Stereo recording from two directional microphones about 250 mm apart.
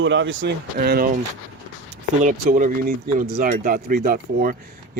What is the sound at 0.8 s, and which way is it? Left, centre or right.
Speech, right.